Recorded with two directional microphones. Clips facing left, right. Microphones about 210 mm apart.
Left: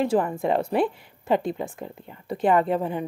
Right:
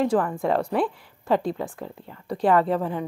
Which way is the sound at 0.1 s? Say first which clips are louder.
Even; 25° left (ahead or behind).